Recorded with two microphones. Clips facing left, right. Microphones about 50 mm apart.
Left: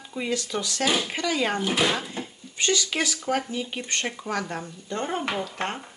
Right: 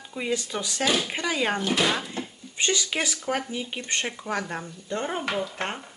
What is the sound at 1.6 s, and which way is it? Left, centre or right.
Speech, centre.